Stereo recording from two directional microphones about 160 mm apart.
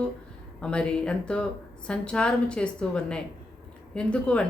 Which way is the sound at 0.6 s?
5° left (ahead or behind).